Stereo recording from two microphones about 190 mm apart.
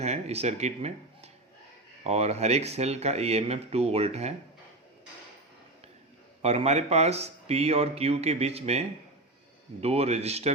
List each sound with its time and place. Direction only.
0.0 s speech: 35° right (ahead or behind)
6.4 s speech: 35° right (ahead or behind)